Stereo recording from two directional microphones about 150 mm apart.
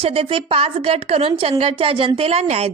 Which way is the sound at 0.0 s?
40° right (ahead or behind).